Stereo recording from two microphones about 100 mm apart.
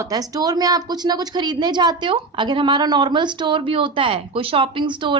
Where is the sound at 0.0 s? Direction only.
40° right (ahead or behind).